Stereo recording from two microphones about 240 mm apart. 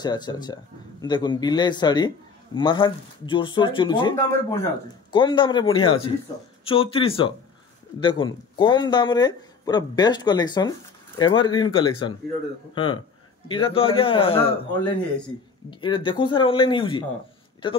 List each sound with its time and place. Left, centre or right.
0.0 s a man's voice: centre
15.7 s a man's voice: centre